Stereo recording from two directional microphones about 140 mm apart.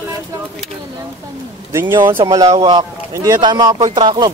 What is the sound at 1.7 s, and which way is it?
Speech, 20° right (ahead or behind).